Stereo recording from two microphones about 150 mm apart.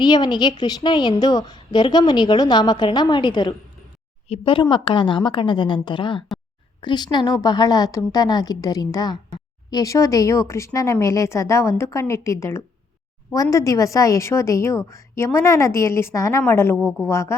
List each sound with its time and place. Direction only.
0.0 s a woman's voice: 30° left (ahead or behind)